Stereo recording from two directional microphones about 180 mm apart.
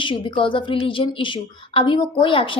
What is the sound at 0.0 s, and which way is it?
A woman's voice, 25° left (ahead or behind).